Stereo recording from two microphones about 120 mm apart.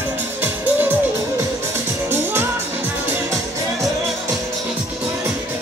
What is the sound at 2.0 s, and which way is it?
Music, 20° right (ahead or behind).